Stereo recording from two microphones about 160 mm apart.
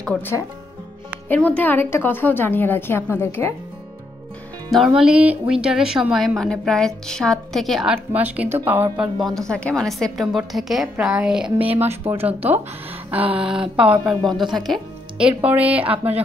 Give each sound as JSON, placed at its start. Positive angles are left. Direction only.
{"t": 0.0, "sound": "a woman's voice", "side_deg": 10}
{"t": 1.6, "sound": "a woman's voice", "side_deg": 10}
{"t": 4.6, "sound": "speech", "side_deg": 0}
{"t": 8.1, "sound": "a woman's voice", "side_deg": -10}
{"t": 11.8, "sound": "speech", "side_deg": -40}
{"t": 12.3, "sound": "a woman's voice", "side_deg": -10}